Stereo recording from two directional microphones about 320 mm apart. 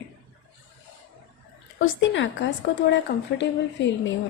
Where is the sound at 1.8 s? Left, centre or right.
Left.